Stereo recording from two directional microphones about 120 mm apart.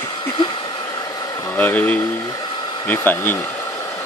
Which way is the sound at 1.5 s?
15° left (ahead or behind).